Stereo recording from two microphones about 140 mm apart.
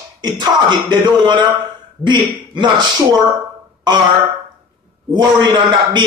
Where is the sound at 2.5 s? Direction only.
30° right (ahead or behind).